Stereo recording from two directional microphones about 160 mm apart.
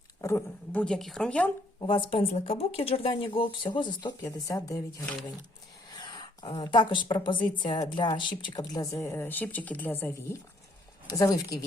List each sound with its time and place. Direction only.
0.2 s speech: 15° left (ahead or behind)
1.8 s a woman's voice: 30° left (ahead or behind)